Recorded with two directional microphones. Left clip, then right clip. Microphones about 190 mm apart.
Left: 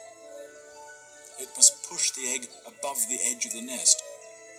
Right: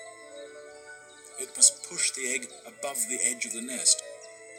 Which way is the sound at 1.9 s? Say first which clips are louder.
Even; centre (ahead or behind).